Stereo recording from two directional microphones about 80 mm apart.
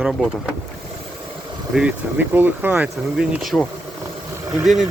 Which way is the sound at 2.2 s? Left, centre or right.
Right.